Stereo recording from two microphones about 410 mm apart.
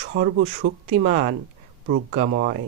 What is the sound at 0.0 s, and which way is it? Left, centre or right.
Speech, right.